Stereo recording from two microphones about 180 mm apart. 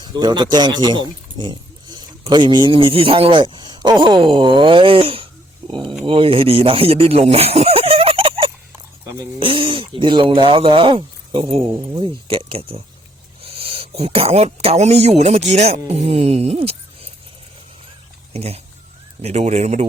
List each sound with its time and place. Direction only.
0.0 s speech: 25° right (ahead or behind)
5.6 s a sound: 25° right (ahead or behind)
6.1 s speech: 30° right (ahead or behind)
18.3 s speech: 35° right (ahead or behind)